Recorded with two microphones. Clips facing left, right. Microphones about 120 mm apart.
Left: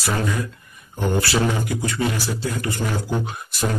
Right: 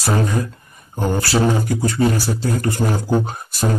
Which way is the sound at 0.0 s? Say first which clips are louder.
Right 4 dB; 35° right (ahead or behind).